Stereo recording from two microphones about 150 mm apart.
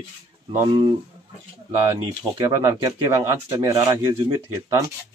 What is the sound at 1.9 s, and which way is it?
Speech, 30° right (ahead or behind).